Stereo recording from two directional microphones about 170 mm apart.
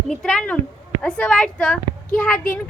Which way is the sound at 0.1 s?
5° left (ahead or behind).